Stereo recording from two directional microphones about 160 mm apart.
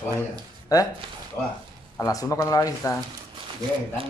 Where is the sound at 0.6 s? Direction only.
20° left (ahead or behind).